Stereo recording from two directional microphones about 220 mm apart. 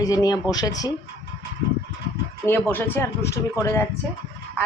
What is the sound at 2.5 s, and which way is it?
Speech, 10° left (ahead or behind).